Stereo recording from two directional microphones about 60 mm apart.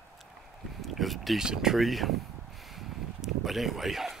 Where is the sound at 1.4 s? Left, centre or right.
Centre.